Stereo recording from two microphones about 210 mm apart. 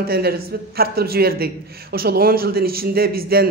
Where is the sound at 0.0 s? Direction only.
45° right (ahead or behind).